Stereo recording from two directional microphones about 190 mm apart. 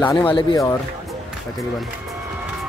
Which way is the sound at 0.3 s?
25° left (ahead or behind).